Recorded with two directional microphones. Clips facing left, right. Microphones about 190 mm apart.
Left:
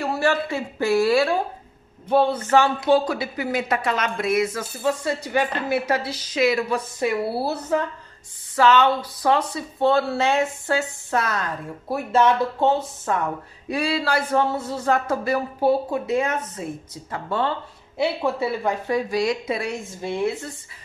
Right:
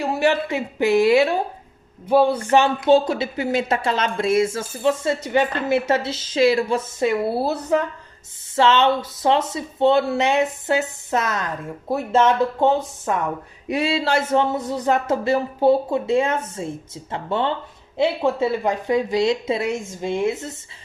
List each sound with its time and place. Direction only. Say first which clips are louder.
0.0 s speech: right 2 dB; 20° right (ahead or behind)
2.5 s speech: right 2 dB; 20° right (ahead or behind)